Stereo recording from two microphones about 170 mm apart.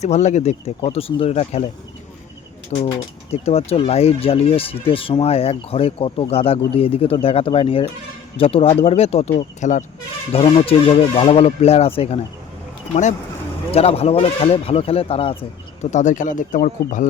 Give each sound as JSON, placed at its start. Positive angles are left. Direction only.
{"t": 0.0, "sound": "speech", "side_deg": 40}
{"t": 0.8, "sound": "speech", "side_deg": 30}
{"t": 2.7, "sound": "speech", "side_deg": 40}
{"t": 10.3, "sound": "speech", "side_deg": 35}
{"t": 15.8, "sound": "speech", "side_deg": 45}